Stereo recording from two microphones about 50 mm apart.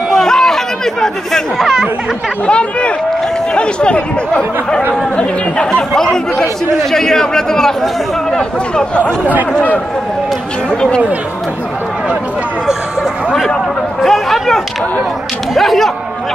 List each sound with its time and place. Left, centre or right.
0.1 s chatter: centre
1.6 s speech: centre
2.4 s a man's voice: left
9.2 s speech: right
9.5 s speech: left
10.7 s a man's voice: centre
14.0 s speech: centre